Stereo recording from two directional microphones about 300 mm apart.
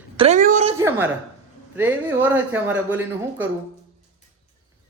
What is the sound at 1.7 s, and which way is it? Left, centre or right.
Speech, centre.